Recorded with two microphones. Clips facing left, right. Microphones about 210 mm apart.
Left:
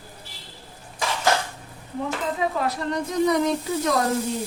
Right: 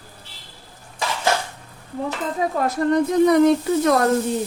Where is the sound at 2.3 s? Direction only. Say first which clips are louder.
Right 7 dB; 45° right (ahead or behind).